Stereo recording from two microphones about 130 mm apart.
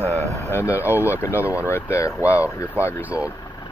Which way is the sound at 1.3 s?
15° right (ahead or behind).